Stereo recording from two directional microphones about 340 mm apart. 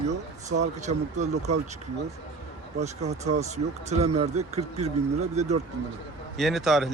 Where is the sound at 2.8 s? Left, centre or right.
Centre.